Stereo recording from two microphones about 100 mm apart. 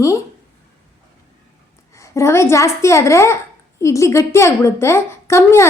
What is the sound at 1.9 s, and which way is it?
A woman's voice, 30° left (ahead or behind).